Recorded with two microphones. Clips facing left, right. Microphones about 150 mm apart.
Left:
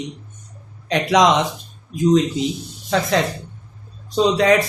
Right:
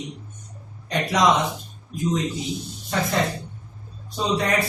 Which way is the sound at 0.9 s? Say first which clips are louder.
Left 5 dB; 90° left.